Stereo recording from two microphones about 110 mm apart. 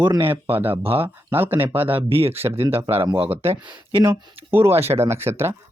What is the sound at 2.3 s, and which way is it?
Speech, 20° right (ahead or behind).